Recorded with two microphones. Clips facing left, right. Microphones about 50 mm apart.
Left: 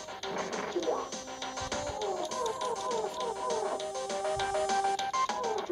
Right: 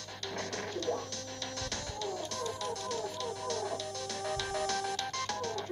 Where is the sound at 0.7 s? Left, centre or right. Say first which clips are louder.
Left 4 dB; left.